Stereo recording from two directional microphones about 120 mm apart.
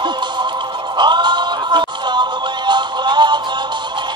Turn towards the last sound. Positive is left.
turn(degrees=-40)  # may be behind; listen again after turning